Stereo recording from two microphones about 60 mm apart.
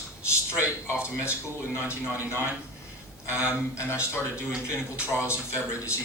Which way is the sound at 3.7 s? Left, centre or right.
Left.